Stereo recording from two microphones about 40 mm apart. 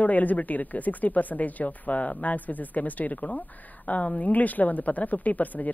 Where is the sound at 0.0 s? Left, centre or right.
Left.